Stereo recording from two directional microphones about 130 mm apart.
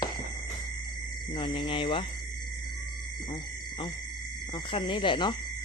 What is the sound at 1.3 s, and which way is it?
Speech, 40° left (ahead or behind).